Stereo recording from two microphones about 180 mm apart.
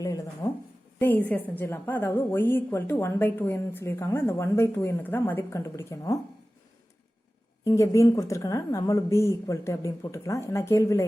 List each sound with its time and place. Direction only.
0.4 s a sound: 15° left (ahead or behind)
0.9 s a woman's voice: 10° left (ahead or behind)
7.6 s a woman's voice: 15° left (ahead or behind)